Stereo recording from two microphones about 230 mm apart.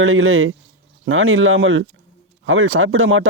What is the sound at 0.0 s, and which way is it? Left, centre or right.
Speech, right.